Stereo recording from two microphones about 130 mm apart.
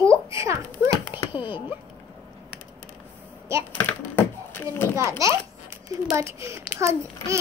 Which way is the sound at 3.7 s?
15° left (ahead or behind).